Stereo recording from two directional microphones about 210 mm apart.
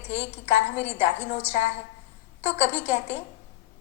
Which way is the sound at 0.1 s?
10° right (ahead or behind).